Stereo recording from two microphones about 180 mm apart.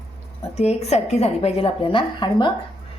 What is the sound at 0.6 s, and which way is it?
A woman's voice, 35° left (ahead or behind).